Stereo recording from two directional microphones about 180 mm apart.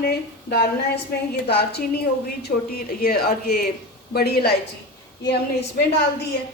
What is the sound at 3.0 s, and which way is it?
A woman's voice, 60° left (ahead or behind).